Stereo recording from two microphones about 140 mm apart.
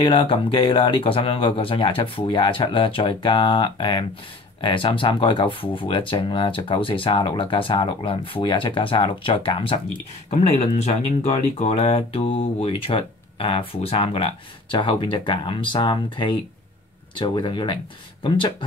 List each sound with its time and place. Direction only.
0.0 s speech: 35° left (ahead or behind)
10.3 s speech: 50° left (ahead or behind)